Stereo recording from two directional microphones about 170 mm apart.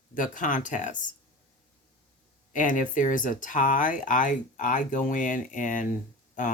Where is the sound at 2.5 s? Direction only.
50° left (ahead or behind).